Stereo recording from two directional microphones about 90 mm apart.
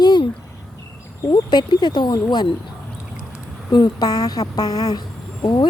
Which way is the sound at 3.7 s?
50° left (ahead or behind).